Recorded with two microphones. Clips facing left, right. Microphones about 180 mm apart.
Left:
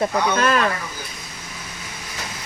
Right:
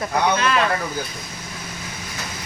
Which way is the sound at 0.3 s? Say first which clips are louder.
Left 2 dB; 45° left (ahead or behind).